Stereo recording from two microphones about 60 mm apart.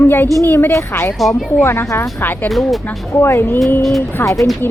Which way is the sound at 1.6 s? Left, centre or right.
Left.